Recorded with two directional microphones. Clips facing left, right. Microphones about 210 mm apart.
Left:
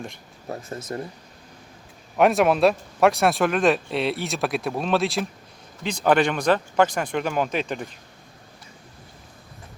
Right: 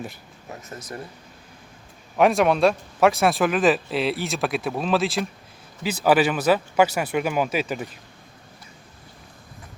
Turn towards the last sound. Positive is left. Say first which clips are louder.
# right 1 dB
turn(degrees=-5)  # may be behind; listen again after turning